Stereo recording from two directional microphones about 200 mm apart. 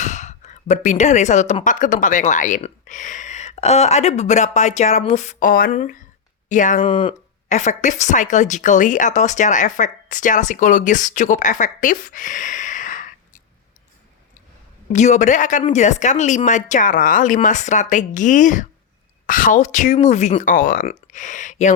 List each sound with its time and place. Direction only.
0.0 s a woman's voice: 35° left (ahead or behind)
6.8 s speech: 25° left (ahead or behind)
7.4 s a woman's voice: 35° left (ahead or behind)
14.9 s a woman's voice: 35° left (ahead or behind)